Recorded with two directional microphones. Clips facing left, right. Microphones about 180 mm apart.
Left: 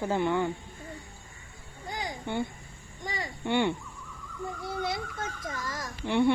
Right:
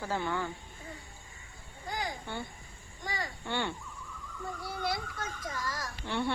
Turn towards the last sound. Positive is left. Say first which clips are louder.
# left 8 dB
turn(degrees=15)  # may be behind; listen again after turning